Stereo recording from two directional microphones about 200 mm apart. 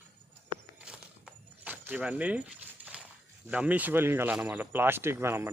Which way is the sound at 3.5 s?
5° right (ahead or behind).